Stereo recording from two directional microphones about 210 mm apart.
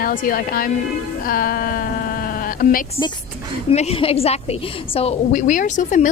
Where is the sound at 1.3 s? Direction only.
45° left (ahead or behind).